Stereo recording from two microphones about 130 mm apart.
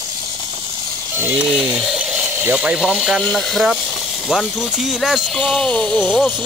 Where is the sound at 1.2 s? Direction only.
10° right (ahead or behind).